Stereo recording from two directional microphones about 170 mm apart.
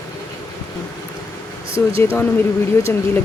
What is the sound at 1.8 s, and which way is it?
Speech, 15° left (ahead or behind).